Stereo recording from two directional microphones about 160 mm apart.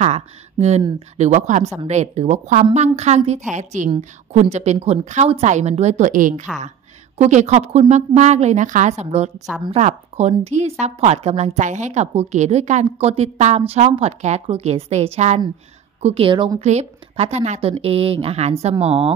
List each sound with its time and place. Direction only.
0.0 s a woman's voice: 45° right (ahead or behind)
16.6 s a woman's voice: 45° right (ahead or behind)